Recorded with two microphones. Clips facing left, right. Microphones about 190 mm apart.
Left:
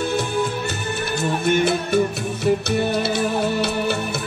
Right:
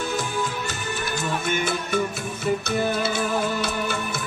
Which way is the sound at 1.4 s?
60° left (ahead or behind).